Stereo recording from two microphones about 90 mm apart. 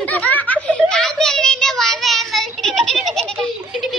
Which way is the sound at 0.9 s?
5° left (ahead or behind).